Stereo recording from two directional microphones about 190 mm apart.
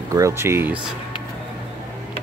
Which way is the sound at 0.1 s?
15° right (ahead or behind).